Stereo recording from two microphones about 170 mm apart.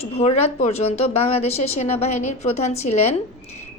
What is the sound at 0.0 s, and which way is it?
A woman's voice, 40° left (ahead or behind).